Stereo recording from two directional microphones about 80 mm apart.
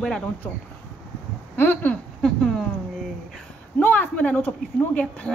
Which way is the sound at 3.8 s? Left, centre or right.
Left.